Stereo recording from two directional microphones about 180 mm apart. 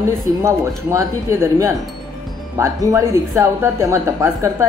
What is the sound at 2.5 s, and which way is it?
Speech, 15° right (ahead or behind).